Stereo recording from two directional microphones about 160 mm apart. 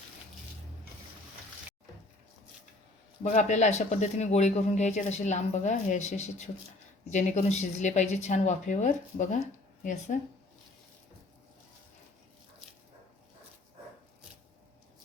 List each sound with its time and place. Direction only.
3.2 s speech: 50° left (ahead or behind)